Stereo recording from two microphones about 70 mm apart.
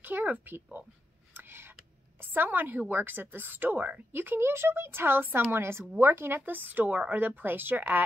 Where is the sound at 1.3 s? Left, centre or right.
Right.